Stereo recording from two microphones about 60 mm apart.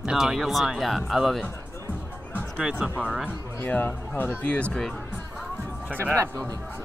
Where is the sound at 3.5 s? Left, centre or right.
Left.